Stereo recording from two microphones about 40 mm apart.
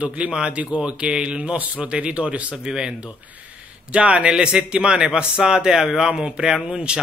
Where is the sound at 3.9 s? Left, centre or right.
Right.